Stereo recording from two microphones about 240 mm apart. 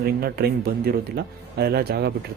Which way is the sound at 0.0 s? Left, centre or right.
Right.